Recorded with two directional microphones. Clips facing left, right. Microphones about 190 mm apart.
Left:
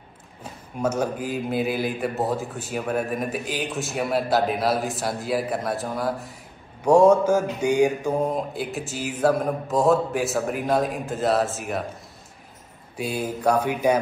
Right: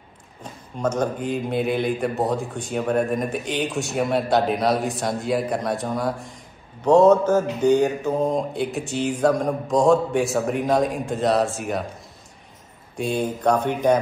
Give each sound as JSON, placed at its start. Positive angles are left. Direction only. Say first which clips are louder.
{"t": 0.4, "sound": "speech", "louder": "even", "side_deg": 10}
{"t": 12.9, "sound": "speech", "louder": "right 3 dB", "side_deg": 5}